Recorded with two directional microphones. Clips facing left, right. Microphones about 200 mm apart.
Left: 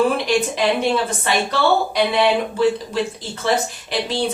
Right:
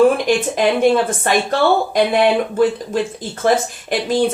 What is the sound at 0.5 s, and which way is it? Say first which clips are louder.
Speech: right 5 dB; 50° right (ahead or behind).